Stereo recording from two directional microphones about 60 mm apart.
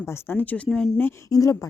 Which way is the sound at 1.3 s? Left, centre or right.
Left.